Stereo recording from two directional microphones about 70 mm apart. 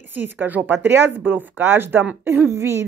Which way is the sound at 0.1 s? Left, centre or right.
Right.